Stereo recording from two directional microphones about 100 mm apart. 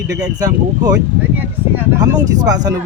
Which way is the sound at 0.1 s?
35° right (ahead or behind).